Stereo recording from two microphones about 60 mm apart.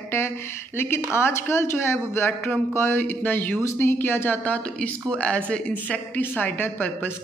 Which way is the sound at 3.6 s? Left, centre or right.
Left.